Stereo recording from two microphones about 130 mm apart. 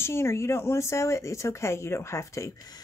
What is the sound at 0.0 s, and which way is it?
Speech, 20° left (ahead or behind).